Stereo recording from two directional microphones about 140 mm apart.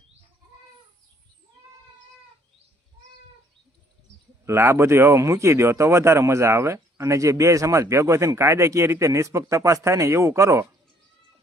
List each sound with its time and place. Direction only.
4.4 s speech: 20° right (ahead or behind)